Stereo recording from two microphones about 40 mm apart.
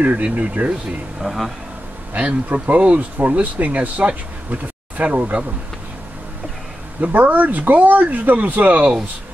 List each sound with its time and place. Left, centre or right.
0.0 s speech: right
1.2 s speech: centre
2.1 s speech: right
7.0 s speech: right